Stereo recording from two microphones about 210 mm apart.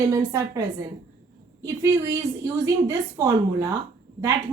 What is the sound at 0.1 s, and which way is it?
Speech, 15° right (ahead or behind).